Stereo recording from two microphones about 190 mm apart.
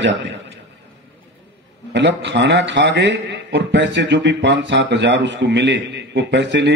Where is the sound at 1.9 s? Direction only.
70° right (ahead or behind).